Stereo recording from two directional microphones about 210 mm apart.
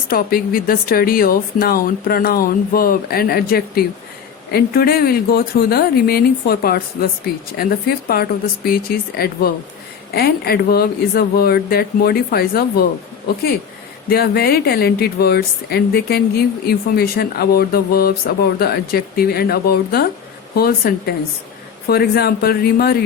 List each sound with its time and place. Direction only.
0.1 s a woman's voice: 45° left (ahead or behind)
14.1 s a woman's voice: 45° left (ahead or behind)